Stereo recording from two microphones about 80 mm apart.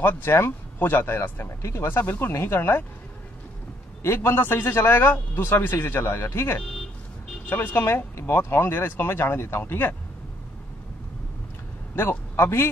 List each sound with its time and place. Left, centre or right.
0.0 s speech: left
4.0 s a man's voice: left
11.9 s speech: left